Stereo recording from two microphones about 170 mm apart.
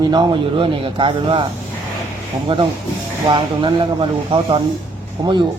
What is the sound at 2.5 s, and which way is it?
Speech, 30° right (ahead or behind).